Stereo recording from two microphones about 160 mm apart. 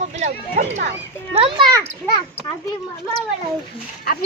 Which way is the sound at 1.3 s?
35° right (ahead or behind).